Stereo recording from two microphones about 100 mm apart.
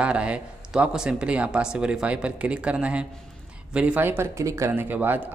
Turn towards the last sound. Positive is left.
turn(degrees=-20)  # may be behind; listen again after turning